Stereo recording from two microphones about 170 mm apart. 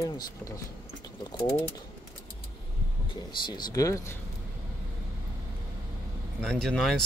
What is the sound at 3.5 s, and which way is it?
Speech, 25° left (ahead or behind).